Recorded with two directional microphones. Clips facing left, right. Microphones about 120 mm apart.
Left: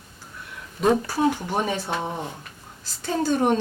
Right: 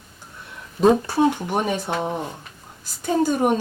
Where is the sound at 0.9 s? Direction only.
20° right (ahead or behind).